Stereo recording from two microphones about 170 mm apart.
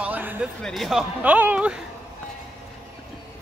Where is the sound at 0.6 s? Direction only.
Centre (ahead or behind).